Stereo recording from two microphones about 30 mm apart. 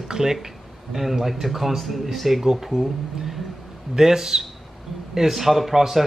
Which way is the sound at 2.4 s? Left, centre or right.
Centre.